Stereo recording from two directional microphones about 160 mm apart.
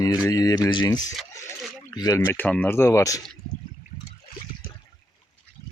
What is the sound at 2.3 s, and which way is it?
Speech, 10° left (ahead or behind).